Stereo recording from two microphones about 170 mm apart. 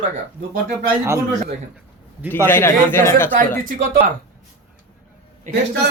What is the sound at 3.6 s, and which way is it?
Speech, 55° right (ahead or behind).